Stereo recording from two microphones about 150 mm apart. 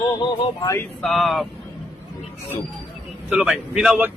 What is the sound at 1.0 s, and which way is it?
Speech, centre (ahead or behind).